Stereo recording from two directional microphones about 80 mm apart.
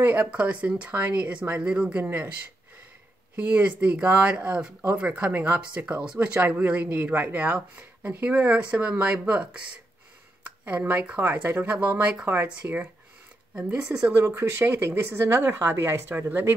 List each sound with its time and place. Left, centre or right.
0.0 s speech: right
3.3 s speech: centre
12.6 s speech: right
13.6 s speech: centre
14.1 s speech: right